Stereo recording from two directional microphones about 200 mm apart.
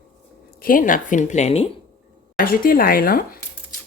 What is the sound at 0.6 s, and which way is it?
Speech, 45° left (ahead or behind).